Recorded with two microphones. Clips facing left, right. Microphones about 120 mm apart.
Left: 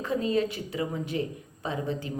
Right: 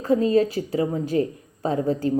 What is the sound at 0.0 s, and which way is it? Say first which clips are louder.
A woman's voice: right 8 dB; 40° right (ahead or behind).